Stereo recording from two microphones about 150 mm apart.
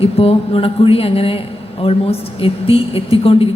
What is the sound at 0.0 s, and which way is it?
A woman's voice, 40° left (ahead or behind).